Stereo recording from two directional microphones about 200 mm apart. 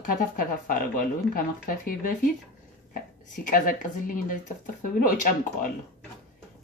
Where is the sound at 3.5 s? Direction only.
45° left (ahead or behind).